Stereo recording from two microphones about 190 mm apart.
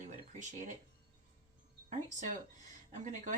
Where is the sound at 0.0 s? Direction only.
40° right (ahead or behind).